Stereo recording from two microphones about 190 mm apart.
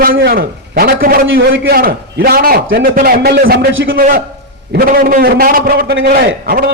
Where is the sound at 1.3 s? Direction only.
80° right.